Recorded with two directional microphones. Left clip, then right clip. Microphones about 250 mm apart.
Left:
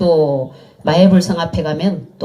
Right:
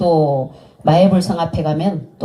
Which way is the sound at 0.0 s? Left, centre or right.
Left.